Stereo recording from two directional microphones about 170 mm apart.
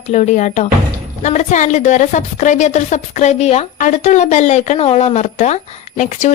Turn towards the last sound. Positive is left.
turn(degrees=45)  # may be behind; listen again after turning